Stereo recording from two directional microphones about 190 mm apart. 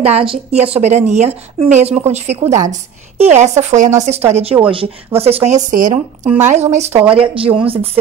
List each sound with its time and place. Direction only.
0.0 s speech: 30° right (ahead or behind)
6.9 s speech: 5° right (ahead or behind)
7.2 s speech: 30° right (ahead or behind)